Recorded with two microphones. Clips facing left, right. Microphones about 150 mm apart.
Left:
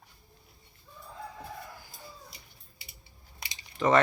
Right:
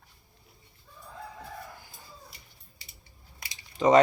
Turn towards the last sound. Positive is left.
turn(degrees=-20)  # may be behind; listen again after turning